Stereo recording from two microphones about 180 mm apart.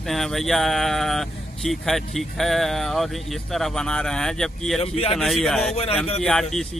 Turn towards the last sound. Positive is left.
turn(degrees=0)  # may be behind; listen again after turning